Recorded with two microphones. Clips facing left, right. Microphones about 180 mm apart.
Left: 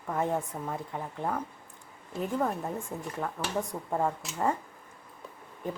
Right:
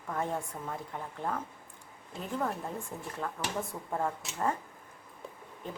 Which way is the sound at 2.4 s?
15° left (ahead or behind).